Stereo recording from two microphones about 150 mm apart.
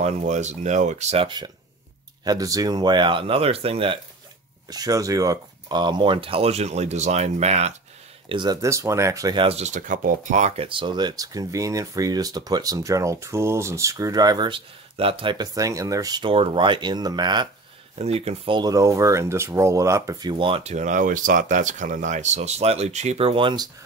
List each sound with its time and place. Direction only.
0.0 s speech: 50° right (ahead or behind); by 1.5 s 35° right (ahead or behind)
2.2 s speech: 25° right (ahead or behind); by 4.0 s 40° right (ahead or behind)
4.6 s speech: 25° right (ahead or behind); by 7.7 s 45° right (ahead or behind)
8.3 s speech: 30° right (ahead or behind)
9.4 s speech: 45° right (ahead or behind); by 17.5 s 30° right (ahead or behind)
17.9 s speech: 45° right (ahead or behind)